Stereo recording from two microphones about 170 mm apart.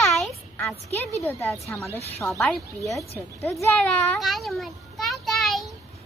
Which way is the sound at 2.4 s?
Centre (ahead or behind).